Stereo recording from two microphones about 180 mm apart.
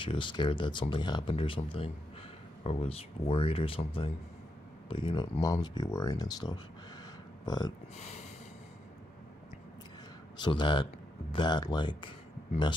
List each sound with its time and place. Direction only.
0.0 s speech: 25° left (ahead or behind)
7.9 s speech: 35° left (ahead or behind)
10.3 s speech: 25° left (ahead or behind)